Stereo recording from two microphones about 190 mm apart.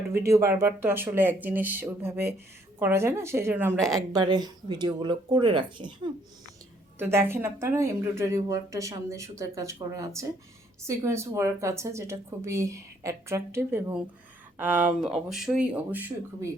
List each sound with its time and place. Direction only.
0.1 s a woman's voice: 15° right (ahead or behind)
3.9 s speech: 20° right (ahead or behind)
7.0 s a woman's voice: 10° right (ahead or behind)